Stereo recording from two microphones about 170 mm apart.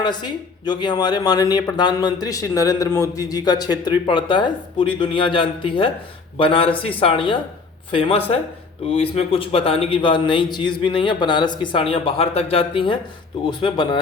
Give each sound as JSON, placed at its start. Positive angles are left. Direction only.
{"t": 0.0, "sound": "a man's voice", "side_deg": 25}